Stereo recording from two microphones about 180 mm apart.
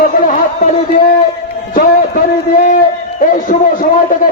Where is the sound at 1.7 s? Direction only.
50° left (ahead or behind).